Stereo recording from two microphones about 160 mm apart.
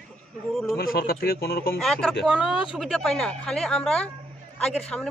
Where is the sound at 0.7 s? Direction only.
70° left (ahead or behind).